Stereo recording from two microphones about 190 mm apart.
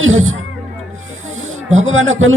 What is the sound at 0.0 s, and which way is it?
Speech, 90° right.